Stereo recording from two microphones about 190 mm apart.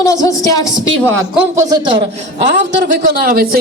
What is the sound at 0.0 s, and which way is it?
Speech, 15° left (ahead or behind).